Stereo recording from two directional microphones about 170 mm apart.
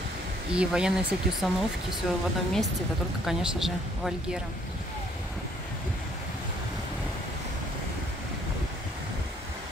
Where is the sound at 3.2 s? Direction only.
Centre (ahead or behind).